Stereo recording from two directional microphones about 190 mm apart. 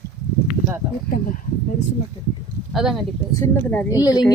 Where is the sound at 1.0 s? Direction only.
50° left (ahead or behind).